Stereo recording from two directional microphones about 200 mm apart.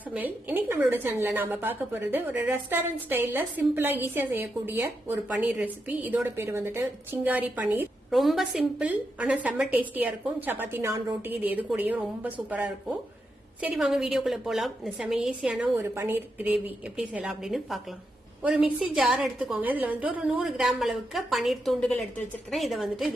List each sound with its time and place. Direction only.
0.1 s a woman's voice: 10° right (ahead or behind)